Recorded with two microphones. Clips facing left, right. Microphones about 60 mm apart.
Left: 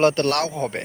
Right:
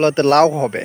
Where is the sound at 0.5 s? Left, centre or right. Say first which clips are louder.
Right 6 dB; centre.